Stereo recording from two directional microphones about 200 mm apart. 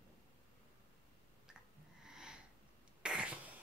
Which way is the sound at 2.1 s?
5° right (ahead or behind).